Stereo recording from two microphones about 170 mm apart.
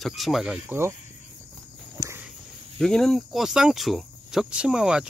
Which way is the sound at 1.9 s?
15° right (ahead or behind).